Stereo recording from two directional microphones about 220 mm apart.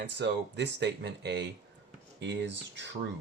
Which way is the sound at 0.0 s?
50° right (ahead or behind).